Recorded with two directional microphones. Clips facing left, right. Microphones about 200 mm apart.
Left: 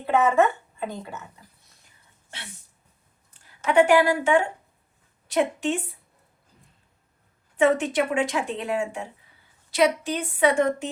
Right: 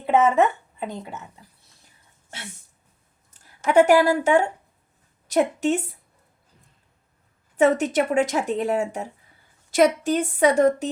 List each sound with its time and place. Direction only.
0.0 s speech: 20° right (ahead or behind)
3.3 s a sound: 40° right (ahead or behind)
3.7 s speech: 40° right (ahead or behind)
7.5 s a woman's voice: 40° right (ahead or behind)